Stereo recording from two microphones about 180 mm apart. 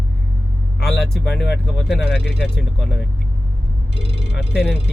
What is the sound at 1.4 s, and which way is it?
Speech, 65° left (ahead or behind).